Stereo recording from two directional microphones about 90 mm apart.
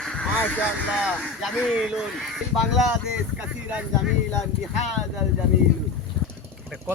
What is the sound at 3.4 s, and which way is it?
Speech, 15° right (ahead or behind).